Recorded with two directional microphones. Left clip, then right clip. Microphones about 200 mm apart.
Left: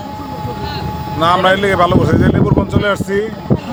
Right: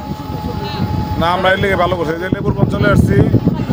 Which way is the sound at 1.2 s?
15° left (ahead or behind).